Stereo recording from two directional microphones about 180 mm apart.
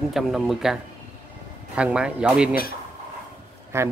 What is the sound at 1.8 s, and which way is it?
Speech, 5° right (ahead or behind).